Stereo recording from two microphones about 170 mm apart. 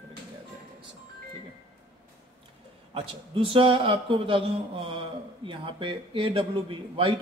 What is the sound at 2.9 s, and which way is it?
A man's voice, 30° right (ahead or behind).